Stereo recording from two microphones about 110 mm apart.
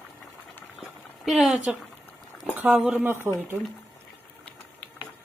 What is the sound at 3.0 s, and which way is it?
Speech, 20° right (ahead or behind).